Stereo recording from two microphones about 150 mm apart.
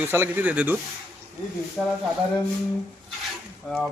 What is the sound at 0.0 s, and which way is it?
Speech, 15° right (ahead or behind).